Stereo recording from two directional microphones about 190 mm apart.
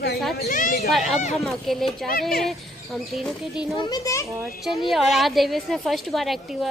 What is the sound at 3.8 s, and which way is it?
Speech, 20° left (ahead or behind).